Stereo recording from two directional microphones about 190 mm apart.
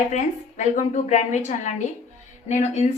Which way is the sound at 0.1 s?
40° left (ahead or behind).